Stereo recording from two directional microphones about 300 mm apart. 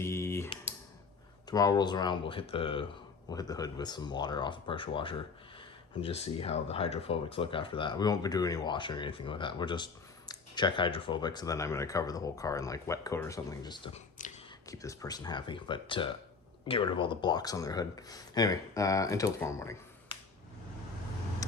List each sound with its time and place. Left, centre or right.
0.0 s typing: centre
1.5 s speech: centre
14.7 s speech: centre